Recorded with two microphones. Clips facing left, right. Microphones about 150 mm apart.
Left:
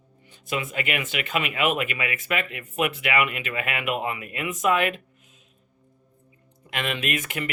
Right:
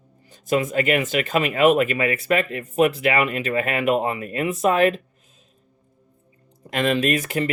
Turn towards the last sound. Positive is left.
turn(degrees=-35)  # may be behind; listen again after turning